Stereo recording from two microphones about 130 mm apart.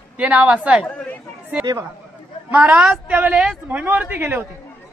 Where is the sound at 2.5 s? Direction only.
10° right (ahead or behind).